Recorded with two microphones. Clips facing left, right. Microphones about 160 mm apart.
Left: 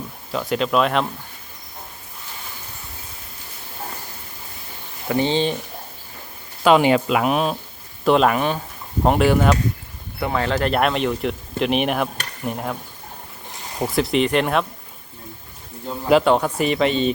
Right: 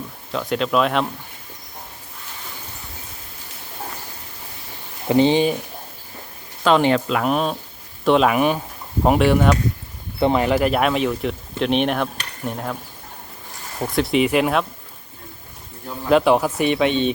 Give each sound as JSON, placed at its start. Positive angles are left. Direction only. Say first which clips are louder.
{"t": 0.3, "sound": "speech", "louder": "even", "side_deg": 0}
{"t": 5.0, "sound": "speech", "louder": "right 4 dB", "side_deg": -20}
{"t": 6.7, "sound": "speech", "louder": "left 2 dB", "side_deg": 10}
{"t": 8.4, "sound": "speech", "louder": "right 3 dB", "side_deg": -10}
{"t": 9.0, "sound": "speech", "louder": "right 1 dB", "side_deg": 0}
{"t": 10.2, "sound": "speech", "louder": "right 5 dB", "side_deg": -25}
{"t": 10.4, "sound": "speech", "louder": "right 2 dB", "side_deg": -10}
{"t": 13.5, "sound": "a sound", "louder": "left 2 dB", "side_deg": 15}
{"t": 13.9, "sound": "speech", "louder": "right 1 dB", "side_deg": 0}
{"t": 16.0, "sound": "speech", "louder": "even", "side_deg": 0}